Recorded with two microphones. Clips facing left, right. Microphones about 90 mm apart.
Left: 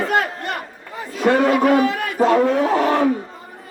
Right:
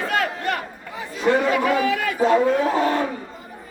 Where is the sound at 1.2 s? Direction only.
65° left (ahead or behind).